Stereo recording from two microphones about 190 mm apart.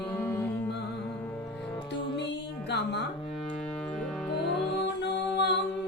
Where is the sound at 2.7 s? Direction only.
65° left (ahead or behind).